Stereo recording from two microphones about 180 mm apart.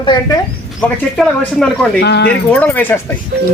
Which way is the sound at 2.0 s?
75° left (ahead or behind).